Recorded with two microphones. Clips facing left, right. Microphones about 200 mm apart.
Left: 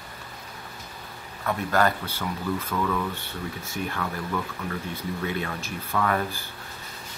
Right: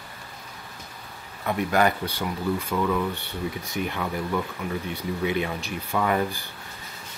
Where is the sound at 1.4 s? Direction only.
15° right (ahead or behind).